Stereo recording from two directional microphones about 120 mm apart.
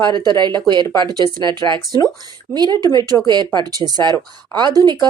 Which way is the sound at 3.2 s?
35° right (ahead or behind).